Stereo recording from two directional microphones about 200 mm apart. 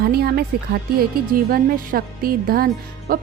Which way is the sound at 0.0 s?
50° right (ahead or behind).